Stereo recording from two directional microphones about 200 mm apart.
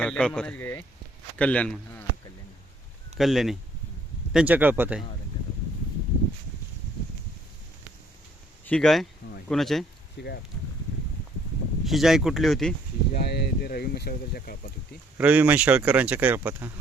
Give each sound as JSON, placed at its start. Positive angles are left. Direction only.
{"t": 0.0, "sound": "speech", "side_deg": 5}
{"t": 3.2, "sound": "speech", "side_deg": 0}
{"t": 8.6, "sound": "speech", "side_deg": 5}
{"t": 10.2, "sound": "speech", "side_deg": 55}
{"t": 11.9, "sound": "speech", "side_deg": 0}
{"t": 13.1, "sound": "speech", "side_deg": 55}
{"t": 15.2, "sound": "speech", "side_deg": -10}